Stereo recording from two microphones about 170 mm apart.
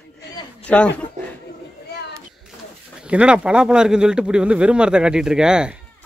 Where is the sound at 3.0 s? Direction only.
5° right (ahead or behind).